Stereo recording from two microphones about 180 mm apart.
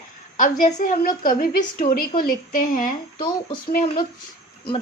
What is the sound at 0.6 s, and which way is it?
A woman's voice, 50° left (ahead or behind).